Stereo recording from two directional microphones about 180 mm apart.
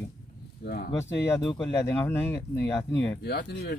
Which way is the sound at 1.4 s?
15° left (ahead or behind).